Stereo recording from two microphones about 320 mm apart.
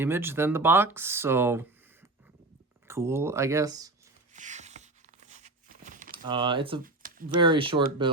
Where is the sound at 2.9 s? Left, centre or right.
Centre.